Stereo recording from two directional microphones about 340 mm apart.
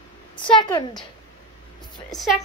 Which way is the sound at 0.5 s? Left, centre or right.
Centre.